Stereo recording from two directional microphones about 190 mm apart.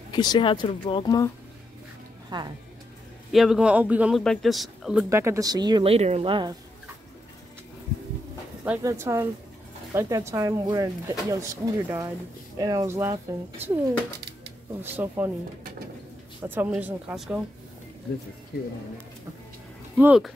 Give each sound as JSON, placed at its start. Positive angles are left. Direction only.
{"t": 0.1, "sound": "speech", "side_deg": 25}
{"t": 2.3, "sound": "speech", "side_deg": -20}
{"t": 3.3, "sound": "speech", "side_deg": 0}
{"t": 5.1, "sound": "speech", "side_deg": -15}
{"t": 8.6, "sound": "speech", "side_deg": -15}
{"t": 14.8, "sound": "speech", "side_deg": -10}
{"t": 16.4, "sound": "speech", "side_deg": -10}
{"t": 20.0, "sound": "speech", "side_deg": -5}